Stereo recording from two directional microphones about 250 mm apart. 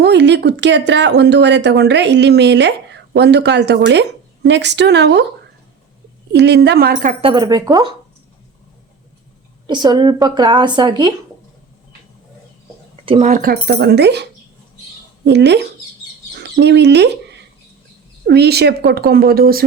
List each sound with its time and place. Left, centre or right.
0.0 s speech: right
6.3 s speech: right; by 7.9 s centre
9.6 s speech: centre
13.1 s speech: right
18.3 s speech: right